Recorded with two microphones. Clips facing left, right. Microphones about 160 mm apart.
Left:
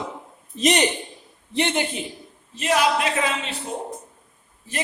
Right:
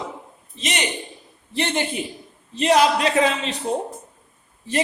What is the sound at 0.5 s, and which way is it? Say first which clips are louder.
Speech: left 8 dB; 40° left (ahead or behind).